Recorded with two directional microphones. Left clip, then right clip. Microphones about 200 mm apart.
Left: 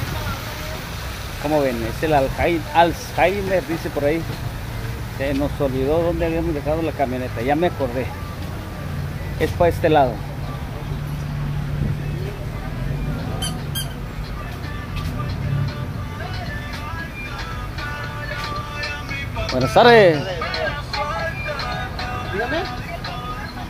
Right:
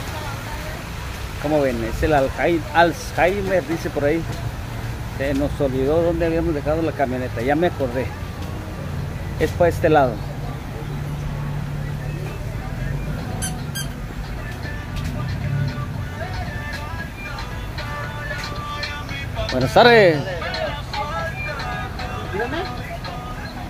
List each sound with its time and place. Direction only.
1.5 s speech: centre (ahead or behind)
5.2 s speech: 5° right (ahead or behind)
9.4 s speech: 5° right (ahead or behind)
19.7 s speech: centre (ahead or behind)
20.4 s music: 15° left (ahead or behind)